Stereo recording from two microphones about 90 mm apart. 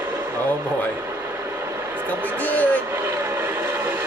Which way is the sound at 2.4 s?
20° left (ahead or behind).